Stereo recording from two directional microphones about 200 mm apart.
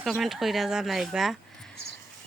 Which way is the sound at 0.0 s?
Centre (ahead or behind).